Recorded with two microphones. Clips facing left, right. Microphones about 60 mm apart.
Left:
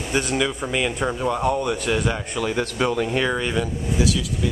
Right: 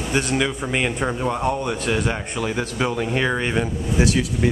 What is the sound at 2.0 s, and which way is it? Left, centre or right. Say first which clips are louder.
Speech: even; right.